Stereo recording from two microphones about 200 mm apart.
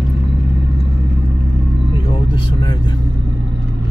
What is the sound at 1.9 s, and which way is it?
Vehicle, 25° left (ahead or behind).